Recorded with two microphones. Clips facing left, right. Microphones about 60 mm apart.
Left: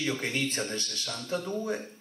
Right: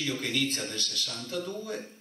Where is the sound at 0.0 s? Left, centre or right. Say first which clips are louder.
Even; left.